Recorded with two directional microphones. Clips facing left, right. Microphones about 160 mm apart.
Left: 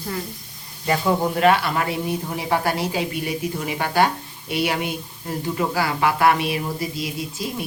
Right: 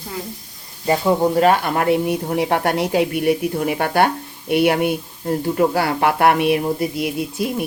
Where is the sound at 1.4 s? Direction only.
40° right (ahead or behind).